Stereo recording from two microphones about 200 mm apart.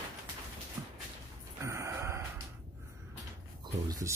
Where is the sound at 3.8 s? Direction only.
15° right (ahead or behind).